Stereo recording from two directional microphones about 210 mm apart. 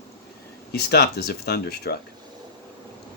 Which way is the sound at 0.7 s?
50° left (ahead or behind).